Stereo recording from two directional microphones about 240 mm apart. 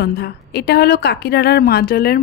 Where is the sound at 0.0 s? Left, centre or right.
Left.